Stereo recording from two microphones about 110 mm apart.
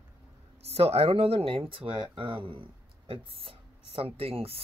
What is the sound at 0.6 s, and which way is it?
Speech, 65° right (ahead or behind).